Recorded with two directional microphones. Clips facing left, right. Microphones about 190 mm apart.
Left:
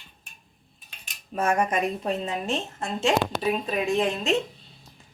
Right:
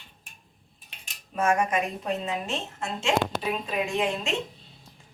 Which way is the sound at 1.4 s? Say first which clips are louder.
Left 1 dB; 35° left (ahead or behind).